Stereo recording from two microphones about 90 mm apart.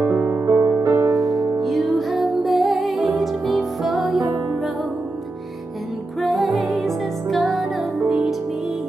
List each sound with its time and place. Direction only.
0.1 s music: 15° right (ahead or behind)
0.5 s music: 25° right (ahead or behind)
1.1 s music: centre (ahead or behind)
6.2 s music: centre (ahead or behind)